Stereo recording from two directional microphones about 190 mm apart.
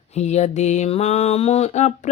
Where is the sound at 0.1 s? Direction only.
35° left (ahead or behind).